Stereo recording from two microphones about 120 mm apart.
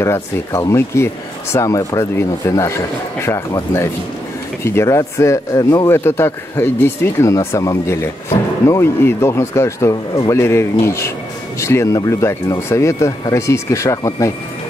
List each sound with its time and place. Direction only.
0.0 s speech: 25° left (ahead or behind)